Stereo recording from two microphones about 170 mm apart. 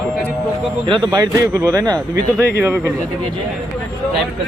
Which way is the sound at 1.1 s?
20° right (ahead or behind).